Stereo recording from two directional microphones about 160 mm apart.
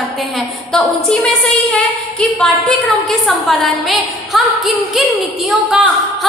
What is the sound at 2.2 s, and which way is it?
A woman's voice, 5° left (ahead or behind).